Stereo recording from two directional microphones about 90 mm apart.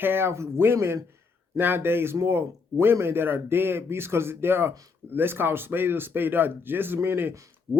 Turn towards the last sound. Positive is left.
turn(degrees=-30)  # may be behind; listen again after turning